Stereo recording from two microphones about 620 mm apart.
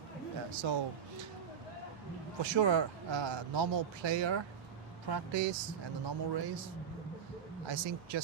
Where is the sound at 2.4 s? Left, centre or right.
Right.